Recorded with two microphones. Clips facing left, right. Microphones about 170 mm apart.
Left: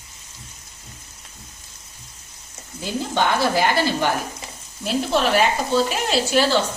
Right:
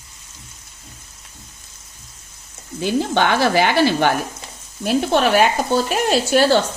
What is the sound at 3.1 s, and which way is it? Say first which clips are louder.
Speech: right 1 dB; 75° right (ahead or behind).